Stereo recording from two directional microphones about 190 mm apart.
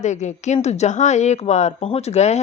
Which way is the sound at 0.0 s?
40° left (ahead or behind).